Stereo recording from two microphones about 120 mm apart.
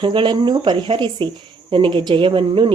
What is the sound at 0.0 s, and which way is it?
A woman's voice, 40° right (ahead or behind).